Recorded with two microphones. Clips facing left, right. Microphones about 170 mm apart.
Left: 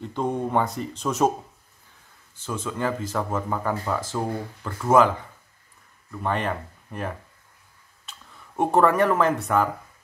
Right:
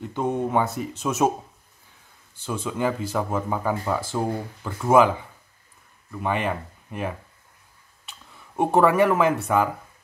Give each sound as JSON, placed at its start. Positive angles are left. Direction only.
{"t": 0.0, "sound": "speech", "side_deg": -5}
{"t": 2.4, "sound": "speech", "side_deg": -10}
{"t": 6.1, "sound": "speech", "side_deg": -10}
{"t": 8.5, "sound": "speech", "side_deg": -10}